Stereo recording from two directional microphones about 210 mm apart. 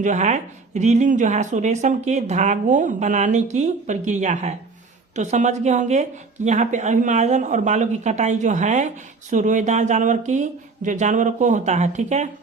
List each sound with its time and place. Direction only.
0.0 s speech: 35° right (ahead or behind)